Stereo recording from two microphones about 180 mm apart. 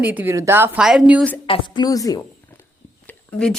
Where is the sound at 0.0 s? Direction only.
10° right (ahead or behind).